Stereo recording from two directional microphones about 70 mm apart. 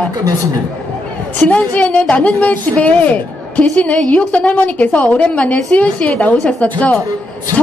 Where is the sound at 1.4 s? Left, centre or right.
Centre.